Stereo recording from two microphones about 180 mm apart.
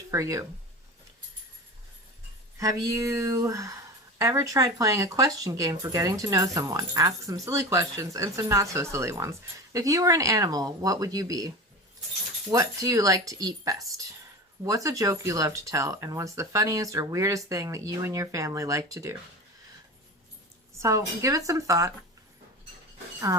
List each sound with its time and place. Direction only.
0.1 s speech: 20° right (ahead or behind)
2.6 s speech: 20° right (ahead or behind)
20.8 s speech: 15° right (ahead or behind)